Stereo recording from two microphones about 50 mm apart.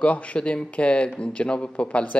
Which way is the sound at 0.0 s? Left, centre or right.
Left.